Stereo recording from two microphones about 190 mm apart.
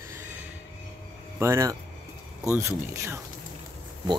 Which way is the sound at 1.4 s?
15° right (ahead or behind).